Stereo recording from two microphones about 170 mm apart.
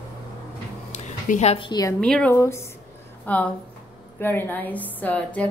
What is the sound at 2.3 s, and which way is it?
A woman's voice, 15° left (ahead or behind).